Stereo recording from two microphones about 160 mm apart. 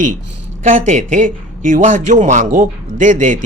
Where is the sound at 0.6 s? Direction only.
45° right (ahead or behind).